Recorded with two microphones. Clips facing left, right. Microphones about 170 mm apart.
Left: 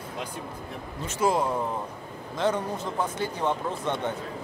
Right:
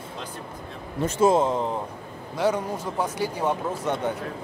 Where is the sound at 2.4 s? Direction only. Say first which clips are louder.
Right 2 dB; 10° right (ahead or behind).